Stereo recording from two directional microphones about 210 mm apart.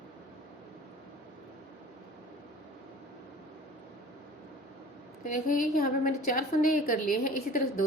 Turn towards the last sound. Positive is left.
turn(degrees=40)  # may be behind; listen again after turning